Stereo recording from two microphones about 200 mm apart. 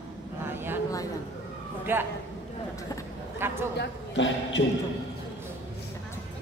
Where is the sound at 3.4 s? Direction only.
10° right (ahead or behind).